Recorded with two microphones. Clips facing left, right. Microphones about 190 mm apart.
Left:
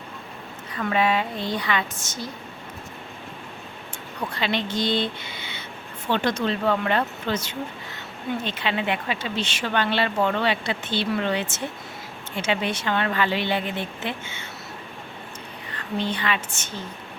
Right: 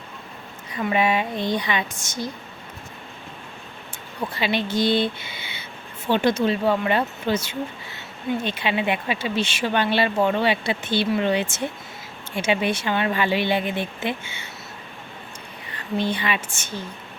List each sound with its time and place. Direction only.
0.7 s speech: 15° right (ahead or behind)
4.3 s speech: 10° right (ahead or behind)
15.7 s speech: 10° right (ahead or behind)